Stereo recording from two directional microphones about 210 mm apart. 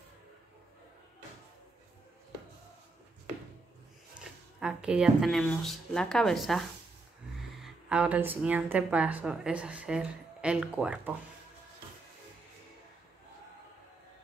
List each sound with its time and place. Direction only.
4.2 s a woman's voice: 5° right (ahead or behind)